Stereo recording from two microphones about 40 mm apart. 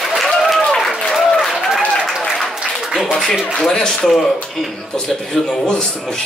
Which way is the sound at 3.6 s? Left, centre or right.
Centre.